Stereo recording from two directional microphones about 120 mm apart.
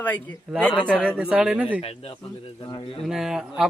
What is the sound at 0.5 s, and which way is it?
Speech, 5° right (ahead or behind).